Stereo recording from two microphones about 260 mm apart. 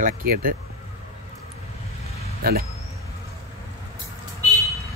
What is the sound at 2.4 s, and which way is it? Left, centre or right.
Speech, right.